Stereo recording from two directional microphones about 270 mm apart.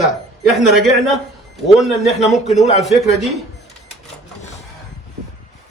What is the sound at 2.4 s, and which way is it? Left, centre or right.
Speech, left.